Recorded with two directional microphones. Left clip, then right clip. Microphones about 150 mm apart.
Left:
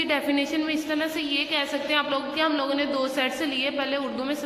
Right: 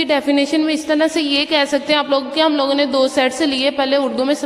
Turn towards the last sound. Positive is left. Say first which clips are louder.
# right 11 dB
turn(degrees=-35)  # may be behind; listen again after turning